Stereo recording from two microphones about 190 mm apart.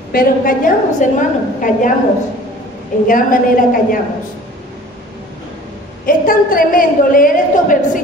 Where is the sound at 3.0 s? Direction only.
45° left (ahead or behind).